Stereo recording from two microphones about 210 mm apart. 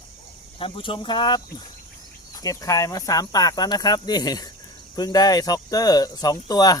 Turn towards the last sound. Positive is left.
turn(degrees=15)  # may be behind; listen again after turning